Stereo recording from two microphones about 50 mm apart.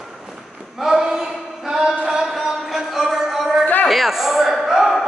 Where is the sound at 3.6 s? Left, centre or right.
Left.